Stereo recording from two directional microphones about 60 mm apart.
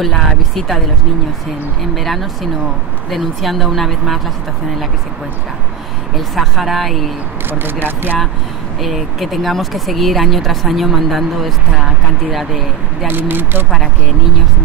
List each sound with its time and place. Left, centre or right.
0.6 s speech: centre
2.0 s speech: centre
6.1 s speech: centre
7.4 s speech: right
8.8 s speech: centre
13.1 s speech: right